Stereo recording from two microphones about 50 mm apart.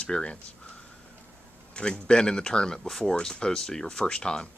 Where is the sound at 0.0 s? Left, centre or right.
Centre.